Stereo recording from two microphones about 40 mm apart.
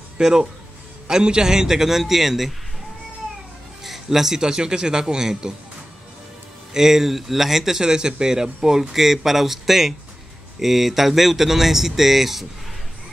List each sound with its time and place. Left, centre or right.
0.2 s speech: centre
3.8 s speech: centre
6.7 s speech: centre